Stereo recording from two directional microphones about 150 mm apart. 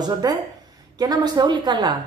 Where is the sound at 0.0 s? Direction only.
25° right (ahead or behind).